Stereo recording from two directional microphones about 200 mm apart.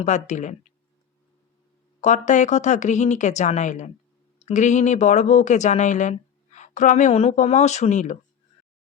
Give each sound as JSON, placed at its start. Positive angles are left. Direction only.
{"t": 0.0, "sound": "speech", "side_deg": 35}
{"t": 2.0, "sound": "speech", "side_deg": 35}